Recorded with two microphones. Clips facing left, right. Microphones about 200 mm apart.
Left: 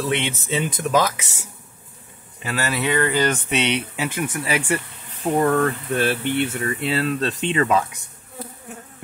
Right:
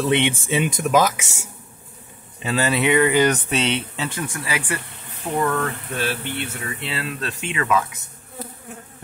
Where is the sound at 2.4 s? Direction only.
25° right (ahead or behind).